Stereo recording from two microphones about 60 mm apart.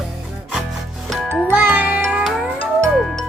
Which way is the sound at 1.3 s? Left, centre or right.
Right.